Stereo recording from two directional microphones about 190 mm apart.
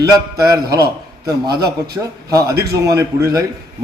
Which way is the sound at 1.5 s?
55° right (ahead or behind).